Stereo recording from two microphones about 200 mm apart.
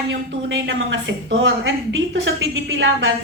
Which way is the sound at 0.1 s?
65° right (ahead or behind).